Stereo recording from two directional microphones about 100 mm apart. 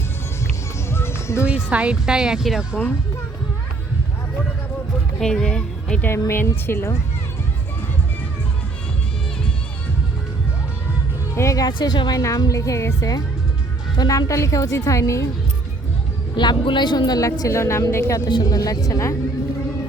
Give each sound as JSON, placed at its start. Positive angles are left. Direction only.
{"t": 0.9, "sound": "music", "side_deg": 25}
{"t": 1.5, "sound": "speech", "side_deg": -15}
{"t": 5.2, "sound": "a woman's voice", "side_deg": 5}
{"t": 6.1, "sound": "a woman's voice", "side_deg": 25}
{"t": 11.3, "sound": "a woman's voice", "side_deg": 35}
{"t": 11.8, "sound": "speech", "side_deg": 50}
{"t": 12.1, "sound": "a woman's voice", "side_deg": 35}
{"t": 16.3, "sound": "speech", "side_deg": 50}
{"t": 17.2, "sound": "a woman's voice", "side_deg": 35}
{"t": 18.3, "sound": "a woman's voice", "side_deg": 45}